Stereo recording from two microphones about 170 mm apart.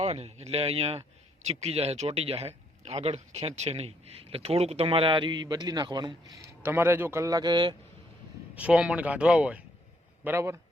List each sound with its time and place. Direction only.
0.0 s a man's voice: 40° right (ahead or behind)
8.5 s speech: 5° right (ahead or behind)